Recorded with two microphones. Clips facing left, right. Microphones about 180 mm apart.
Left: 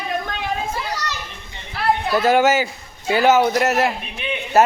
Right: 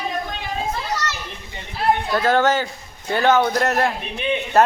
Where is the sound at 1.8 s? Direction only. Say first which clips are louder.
Right 1 dB; 70° left (ahead or behind).